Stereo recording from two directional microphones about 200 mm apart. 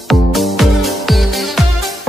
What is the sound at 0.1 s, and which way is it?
Music, centre (ahead or behind).